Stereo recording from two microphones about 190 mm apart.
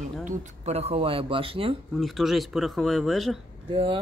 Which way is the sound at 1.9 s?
Centre (ahead or behind).